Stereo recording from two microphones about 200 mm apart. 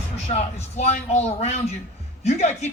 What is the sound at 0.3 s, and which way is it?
Speech, 35° left (ahead or behind).